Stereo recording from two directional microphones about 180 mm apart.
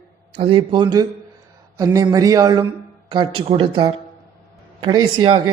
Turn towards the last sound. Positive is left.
turn(degrees=-25)  # may be behind; listen again after turning